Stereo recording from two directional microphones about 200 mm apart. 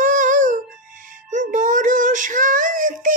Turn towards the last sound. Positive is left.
turn(degrees=-40)  # may be behind; listen again after turning